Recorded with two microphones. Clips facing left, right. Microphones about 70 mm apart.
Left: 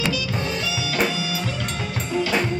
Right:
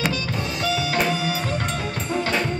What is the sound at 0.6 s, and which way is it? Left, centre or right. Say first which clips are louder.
Music: right 3 dB; right.